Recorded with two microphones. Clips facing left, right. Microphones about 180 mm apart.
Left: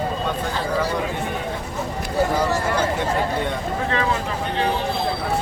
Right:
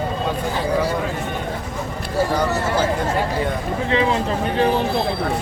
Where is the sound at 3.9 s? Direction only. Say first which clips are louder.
Right 5 dB; 20° right (ahead or behind).